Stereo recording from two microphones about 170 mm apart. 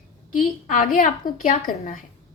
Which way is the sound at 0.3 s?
55° left (ahead or behind).